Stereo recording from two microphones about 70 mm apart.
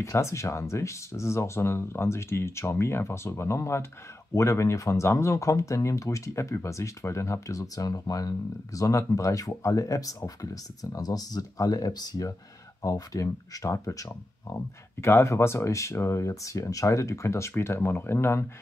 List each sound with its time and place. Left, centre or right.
0.0 s speech: left